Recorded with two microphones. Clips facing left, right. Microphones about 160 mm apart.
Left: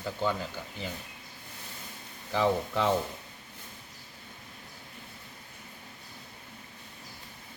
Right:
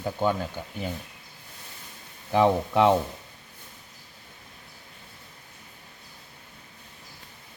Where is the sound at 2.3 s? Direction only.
60° right (ahead or behind).